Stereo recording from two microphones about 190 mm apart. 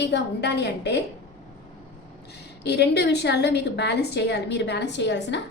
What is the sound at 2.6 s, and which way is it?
A woman's voice, 60° left (ahead or behind).